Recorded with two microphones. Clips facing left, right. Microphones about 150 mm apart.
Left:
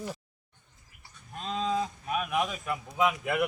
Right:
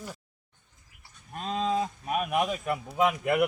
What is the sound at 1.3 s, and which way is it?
Livestock, 45° right (ahead or behind).